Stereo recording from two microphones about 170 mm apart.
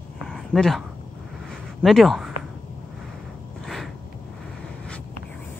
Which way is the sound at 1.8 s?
Centre (ahead or behind).